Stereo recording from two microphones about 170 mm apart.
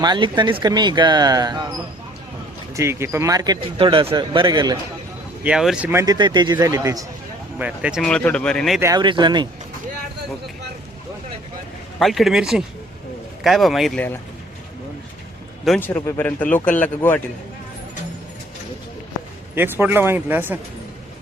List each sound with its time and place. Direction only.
0.0 s speech: 25° right (ahead or behind)
2.7 s speech: 15° right (ahead or behind)
5.4 s speech: 5° right (ahead or behind); by 7.0 s 20° right (ahead or behind)
7.6 s speech: 5° right (ahead or behind)
8.0 s speech: 5° left (ahead or behind)
8.8 s speech: 25° right (ahead or behind)
11.9 s speech: centre (ahead or behind)
15.8 s speech: 15° left (ahead or behind)
19.5 s speech: 10° right (ahead or behind)